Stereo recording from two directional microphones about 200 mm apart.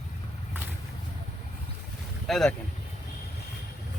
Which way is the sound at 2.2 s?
Centre (ahead or behind).